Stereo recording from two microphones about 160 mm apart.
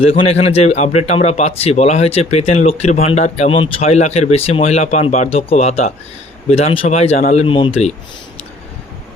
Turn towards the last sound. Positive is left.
turn(degrees=35)  # may be behind; listen again after turning